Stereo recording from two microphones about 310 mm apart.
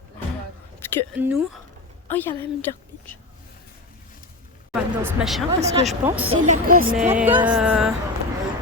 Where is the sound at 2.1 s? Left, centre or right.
Centre.